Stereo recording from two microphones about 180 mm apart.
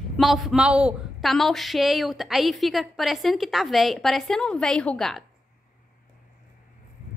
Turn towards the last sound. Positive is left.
turn(degrees=0)  # may be behind; listen again after turning